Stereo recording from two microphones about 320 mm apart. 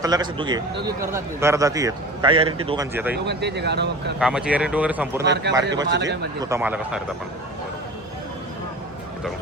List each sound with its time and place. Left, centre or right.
0.0 s a man's voice: centre
3.2 s speech: right
4.2 s speech: centre
5.2 s speech: right
6.4 s speech: centre